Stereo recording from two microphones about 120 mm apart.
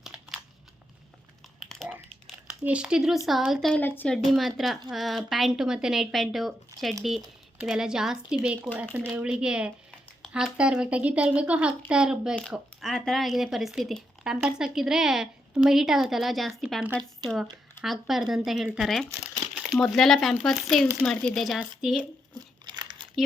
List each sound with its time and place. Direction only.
2.2 s a sound: 5° right (ahead or behind)
3.2 s speech: centre (ahead or behind)
3.8 s speech: 15° left (ahead or behind)
4.1 s speech: centre (ahead or behind)
17.8 s speech: centre (ahead or behind)
22.4 s crumpling: 40° right (ahead or behind)